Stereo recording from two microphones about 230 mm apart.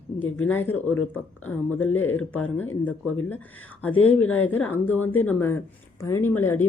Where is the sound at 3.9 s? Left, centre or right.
Left.